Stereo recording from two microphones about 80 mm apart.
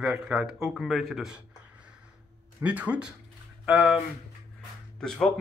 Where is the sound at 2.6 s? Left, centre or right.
Centre.